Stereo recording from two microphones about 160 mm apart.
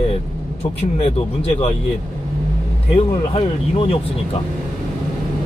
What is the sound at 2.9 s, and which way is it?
Speech, 40° left (ahead or behind).